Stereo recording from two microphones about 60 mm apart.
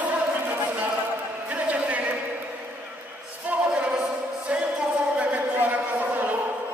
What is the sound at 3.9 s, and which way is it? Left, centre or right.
Music, centre.